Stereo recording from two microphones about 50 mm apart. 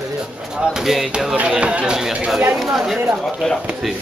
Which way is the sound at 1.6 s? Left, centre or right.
Right.